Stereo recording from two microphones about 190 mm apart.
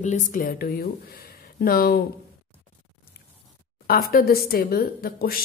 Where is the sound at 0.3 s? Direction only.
45° left (ahead or behind).